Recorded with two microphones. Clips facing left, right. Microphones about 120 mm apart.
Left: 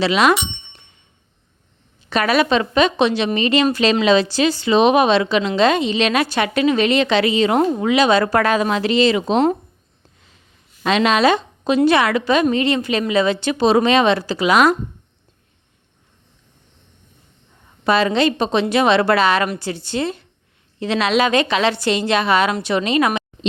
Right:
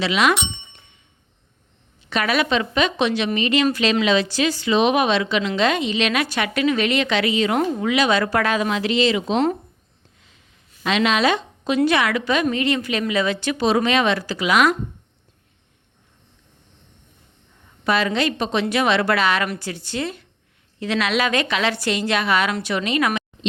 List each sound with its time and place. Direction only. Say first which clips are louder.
0.0 s a woman's voice: left 4 dB; 35° left (ahead or behind)
2.0 s a woman's voice: left 4 dB; 40° left (ahead or behind)
10.8 s a woman's voice: left 4 dB; 40° left (ahead or behind)
17.8 s a woman's voice: left 4 dB; 30° left (ahead or behind)